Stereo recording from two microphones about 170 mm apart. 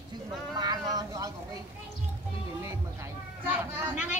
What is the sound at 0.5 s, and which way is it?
Vehicle, 25° right (ahead or behind).